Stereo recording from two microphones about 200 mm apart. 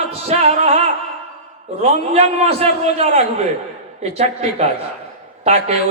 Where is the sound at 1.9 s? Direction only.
30° right (ahead or behind).